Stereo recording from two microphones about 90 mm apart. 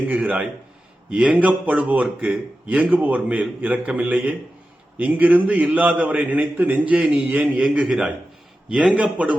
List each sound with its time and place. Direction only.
0.0 s a man's voice: 15° right (ahead or behind)
7.6 s a man's voice: 5° right (ahead or behind)